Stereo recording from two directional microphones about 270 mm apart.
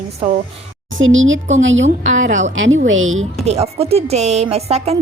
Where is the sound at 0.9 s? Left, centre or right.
Right.